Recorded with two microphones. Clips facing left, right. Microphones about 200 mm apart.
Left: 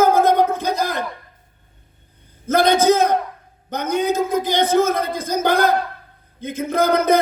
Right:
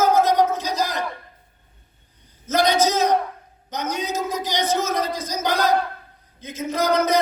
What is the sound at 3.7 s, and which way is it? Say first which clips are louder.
A man's voice: left 7 dB; 55° left (ahead or behind).